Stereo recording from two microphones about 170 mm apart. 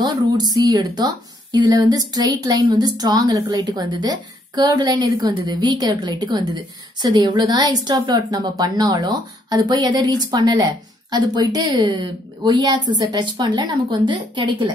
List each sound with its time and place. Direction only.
0.0 s a woman's voice: 25° right (ahead or behind)